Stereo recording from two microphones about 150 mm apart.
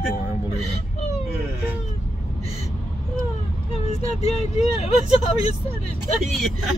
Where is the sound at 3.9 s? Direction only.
45° left (ahead or behind).